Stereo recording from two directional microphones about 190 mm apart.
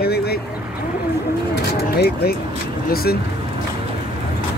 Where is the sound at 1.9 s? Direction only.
55° left (ahead or behind).